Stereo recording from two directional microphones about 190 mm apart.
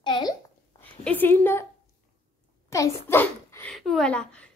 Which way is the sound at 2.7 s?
15° left (ahead or behind).